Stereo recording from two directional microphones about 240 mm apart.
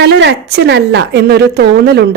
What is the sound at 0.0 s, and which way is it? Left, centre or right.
Speech, right.